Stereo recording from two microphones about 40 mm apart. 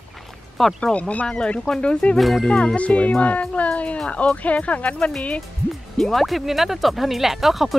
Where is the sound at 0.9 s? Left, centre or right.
Left.